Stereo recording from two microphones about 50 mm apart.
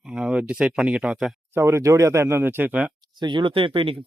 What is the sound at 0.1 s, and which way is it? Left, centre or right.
Speech, centre.